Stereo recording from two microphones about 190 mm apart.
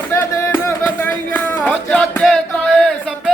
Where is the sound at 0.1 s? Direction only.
10° left (ahead or behind).